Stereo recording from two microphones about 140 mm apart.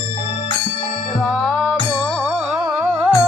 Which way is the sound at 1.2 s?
5° left (ahead or behind).